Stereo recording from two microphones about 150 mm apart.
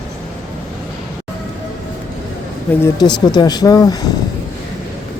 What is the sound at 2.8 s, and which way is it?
Speech, 30° left (ahead or behind).